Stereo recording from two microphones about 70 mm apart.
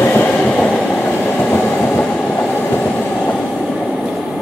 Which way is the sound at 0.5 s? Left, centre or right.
Centre.